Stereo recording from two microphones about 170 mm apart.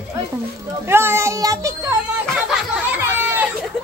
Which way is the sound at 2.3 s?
5° right (ahead or behind).